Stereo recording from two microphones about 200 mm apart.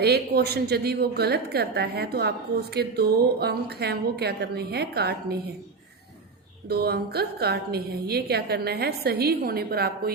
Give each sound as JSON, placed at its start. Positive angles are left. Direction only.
{"t": 0.0, "sound": "a woman's voice", "side_deg": -55}
{"t": 6.7, "sound": "a woman's voice", "side_deg": -55}